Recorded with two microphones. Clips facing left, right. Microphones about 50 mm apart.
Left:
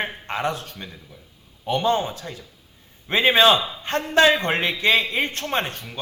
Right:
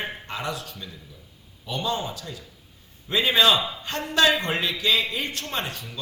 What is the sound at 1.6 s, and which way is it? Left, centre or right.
A man's voice, left.